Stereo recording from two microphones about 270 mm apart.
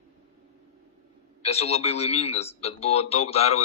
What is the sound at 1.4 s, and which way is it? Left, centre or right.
A man's voice, left.